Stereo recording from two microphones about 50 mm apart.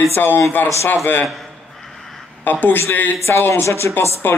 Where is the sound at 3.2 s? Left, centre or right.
Left.